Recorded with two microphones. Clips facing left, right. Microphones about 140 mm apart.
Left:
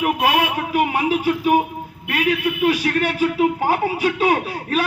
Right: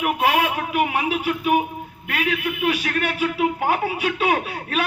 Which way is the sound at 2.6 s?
40° left (ahead or behind).